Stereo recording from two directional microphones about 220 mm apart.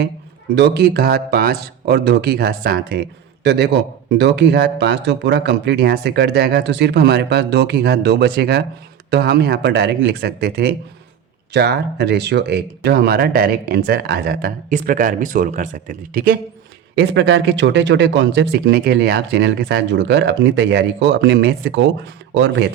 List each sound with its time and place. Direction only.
0.5 s speech: 50° right (ahead or behind)
17.0 s speech: 55° right (ahead or behind)